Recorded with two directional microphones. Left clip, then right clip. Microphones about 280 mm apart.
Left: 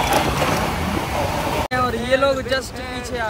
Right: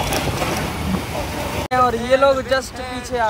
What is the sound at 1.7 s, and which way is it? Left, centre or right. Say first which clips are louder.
Speech: right 6 dB; centre.